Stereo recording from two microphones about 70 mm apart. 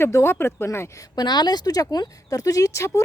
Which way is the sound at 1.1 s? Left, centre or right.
Left.